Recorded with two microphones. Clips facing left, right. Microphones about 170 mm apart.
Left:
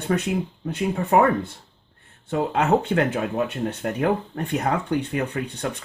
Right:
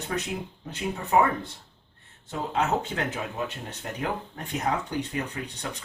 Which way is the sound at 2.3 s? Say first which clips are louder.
Left 6 dB; 60° left (ahead or behind).